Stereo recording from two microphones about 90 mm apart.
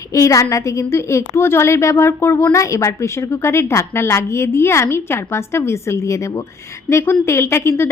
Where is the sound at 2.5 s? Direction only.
35° left (ahead or behind).